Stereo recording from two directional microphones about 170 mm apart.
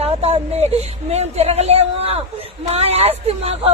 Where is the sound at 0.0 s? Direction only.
35° right (ahead or behind).